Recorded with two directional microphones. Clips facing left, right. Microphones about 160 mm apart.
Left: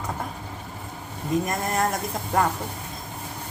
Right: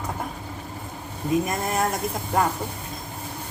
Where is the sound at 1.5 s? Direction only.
5° right (ahead or behind).